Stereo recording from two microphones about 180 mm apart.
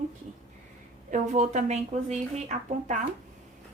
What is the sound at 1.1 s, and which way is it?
Speech, 40° right (ahead or behind).